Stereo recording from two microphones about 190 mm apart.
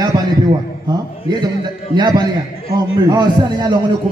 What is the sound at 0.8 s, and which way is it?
A man's voice, 20° right (ahead or behind).